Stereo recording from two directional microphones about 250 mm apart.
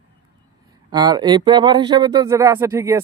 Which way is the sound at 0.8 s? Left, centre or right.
Centre.